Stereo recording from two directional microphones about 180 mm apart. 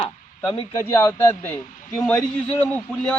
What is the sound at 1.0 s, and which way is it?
A man's voice, 10° left (ahead or behind).